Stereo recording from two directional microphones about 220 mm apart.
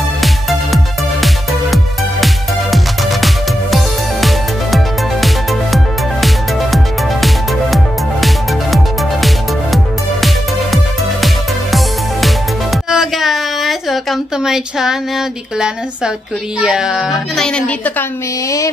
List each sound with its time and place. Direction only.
0.2 s music: centre (ahead or behind)
12.9 s a sound: centre (ahead or behind)
16.5 s a child's voice: 5° right (ahead or behind)